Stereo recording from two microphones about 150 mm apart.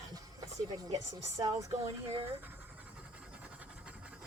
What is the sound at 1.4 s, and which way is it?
Speech, 20° right (ahead or behind).